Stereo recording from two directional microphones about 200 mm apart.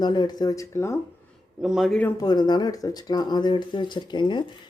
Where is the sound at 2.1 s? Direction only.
20° left (ahead or behind).